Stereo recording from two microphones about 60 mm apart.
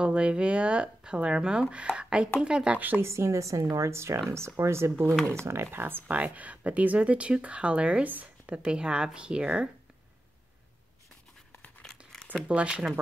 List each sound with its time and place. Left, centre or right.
0.0 s speech: centre
3.0 s speech: right
6.1 s speech: right
8.6 s speech: centre
12.4 s speech: centre